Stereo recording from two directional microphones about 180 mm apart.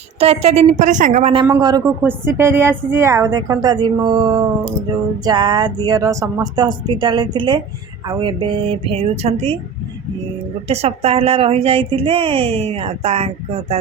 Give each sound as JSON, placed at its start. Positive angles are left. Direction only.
{"t": 0.2, "sound": "speech", "side_deg": -35}
{"t": 1.3, "sound": "speech", "side_deg": -25}
{"t": 2.0, "sound": "a woman's voice", "side_deg": -10}
{"t": 10.7, "sound": "speech", "side_deg": -35}